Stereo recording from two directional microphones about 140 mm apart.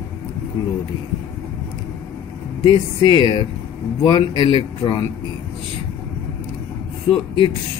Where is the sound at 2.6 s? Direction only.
35° left (ahead or behind).